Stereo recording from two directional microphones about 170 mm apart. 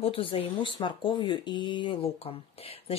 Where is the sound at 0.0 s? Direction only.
30° left (ahead or behind).